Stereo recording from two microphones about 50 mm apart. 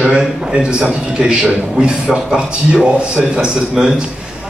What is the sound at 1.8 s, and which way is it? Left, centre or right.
A man's voice, centre.